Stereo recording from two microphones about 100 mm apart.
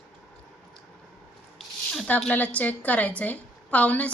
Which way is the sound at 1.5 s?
5° left (ahead or behind).